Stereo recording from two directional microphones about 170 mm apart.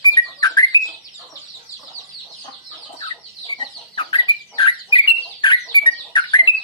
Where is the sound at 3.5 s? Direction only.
30° left (ahead or behind).